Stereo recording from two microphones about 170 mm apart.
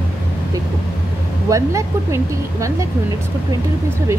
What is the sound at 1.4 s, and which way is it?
Speech, 20° right (ahead or behind).